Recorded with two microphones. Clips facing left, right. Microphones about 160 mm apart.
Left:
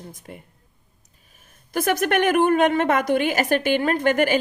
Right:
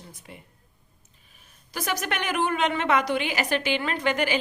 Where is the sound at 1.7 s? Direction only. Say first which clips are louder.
Left 9 dB; 55° left (ahead or behind).